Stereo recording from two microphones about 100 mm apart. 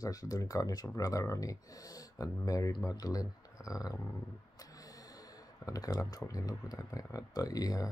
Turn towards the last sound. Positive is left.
turn(degrees=35)  # may be behind; listen again after turning